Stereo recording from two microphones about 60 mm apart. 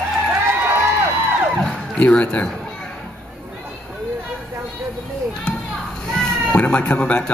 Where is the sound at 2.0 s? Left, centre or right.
Centre.